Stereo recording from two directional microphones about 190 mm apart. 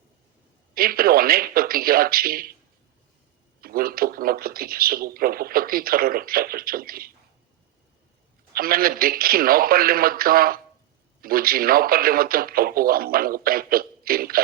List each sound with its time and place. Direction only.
0.7 s speech: 50° right (ahead or behind)
3.6 s speech: 50° right (ahead or behind)
8.5 s speech: 50° right (ahead or behind)